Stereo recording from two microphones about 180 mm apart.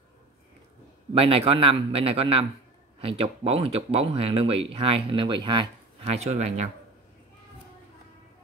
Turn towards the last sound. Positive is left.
turn(degrees=-40)  # may be behind; listen again after turning